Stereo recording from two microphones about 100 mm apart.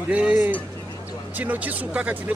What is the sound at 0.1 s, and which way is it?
Speech, 15° right (ahead or behind).